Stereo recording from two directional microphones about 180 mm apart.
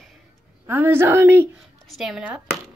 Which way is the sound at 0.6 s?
10° right (ahead or behind).